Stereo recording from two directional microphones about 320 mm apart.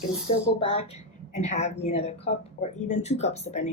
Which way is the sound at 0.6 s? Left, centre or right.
Centre.